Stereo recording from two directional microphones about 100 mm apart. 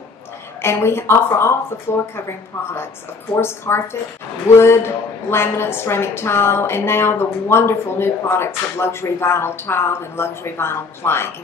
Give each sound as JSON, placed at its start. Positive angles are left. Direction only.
{"t": 0.6, "sound": "a woman's voice", "side_deg": 25}
{"t": 3.3, "sound": "a woman's voice", "side_deg": 25}